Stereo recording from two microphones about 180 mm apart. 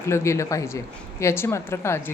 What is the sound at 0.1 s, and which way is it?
A woman's voice, 15° left (ahead or behind).